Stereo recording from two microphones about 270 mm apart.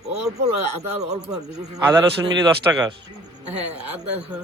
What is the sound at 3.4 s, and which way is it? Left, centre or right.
Speech, right.